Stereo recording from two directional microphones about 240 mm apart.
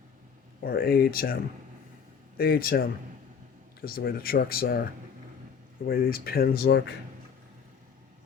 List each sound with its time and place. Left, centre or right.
0.6 s speech: left
2.4 s speech: left
5.9 s speech: left